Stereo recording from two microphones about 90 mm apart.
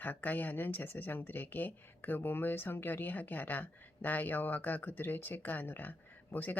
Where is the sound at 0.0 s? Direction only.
20° left (ahead or behind).